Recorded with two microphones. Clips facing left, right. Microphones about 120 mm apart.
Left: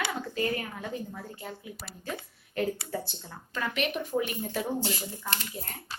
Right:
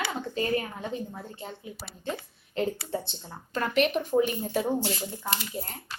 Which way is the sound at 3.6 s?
35° right (ahead or behind).